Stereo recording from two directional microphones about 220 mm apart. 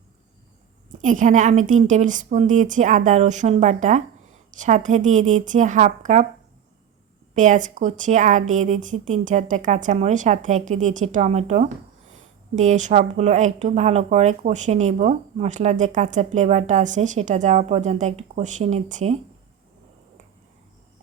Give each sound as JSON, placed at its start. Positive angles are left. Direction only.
{"t": 0.9, "sound": "a woman's voice", "side_deg": -35}
{"t": 7.3, "sound": "a woman's voice", "side_deg": -35}